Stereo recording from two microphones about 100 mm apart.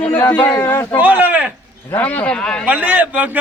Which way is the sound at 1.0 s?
15° right (ahead or behind).